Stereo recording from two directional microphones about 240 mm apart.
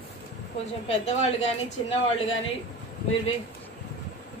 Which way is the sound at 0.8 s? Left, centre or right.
Left.